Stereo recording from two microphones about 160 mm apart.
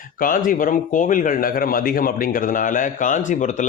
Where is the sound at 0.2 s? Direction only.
60° left (ahead or behind).